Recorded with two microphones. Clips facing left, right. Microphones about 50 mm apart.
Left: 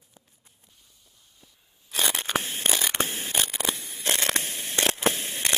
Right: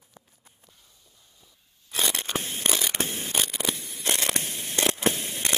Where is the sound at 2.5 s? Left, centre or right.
Left.